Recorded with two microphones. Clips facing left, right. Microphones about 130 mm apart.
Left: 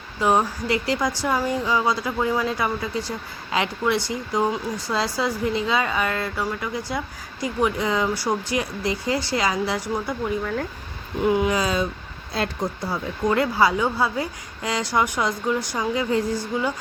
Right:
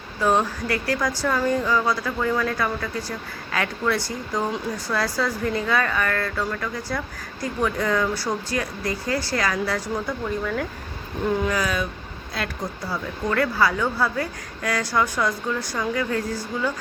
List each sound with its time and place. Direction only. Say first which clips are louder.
0.2 s a woman's voice: left 1 dB; 15° left (ahead or behind)
11.3 s a woman's voice: left 3 dB; 10° left (ahead or behind)
11.5 s speech: left 2 dB; 25° left (ahead or behind)
12.9 s a woman's voice: left 2 dB; 20° left (ahead or behind)